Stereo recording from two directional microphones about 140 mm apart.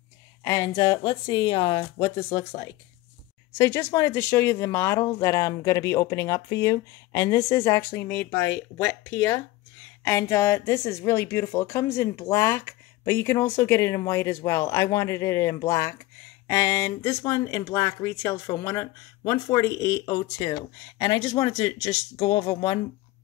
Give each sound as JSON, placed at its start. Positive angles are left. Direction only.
{"t": 0.4, "sound": "a woman's voice", "side_deg": 25}